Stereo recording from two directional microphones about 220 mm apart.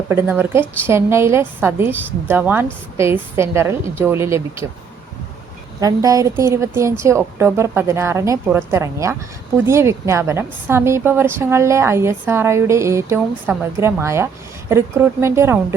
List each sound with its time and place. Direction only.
0.1 s a woman's voice: 10° right (ahead or behind)
5.8 s a woman's voice: 15° right (ahead or behind)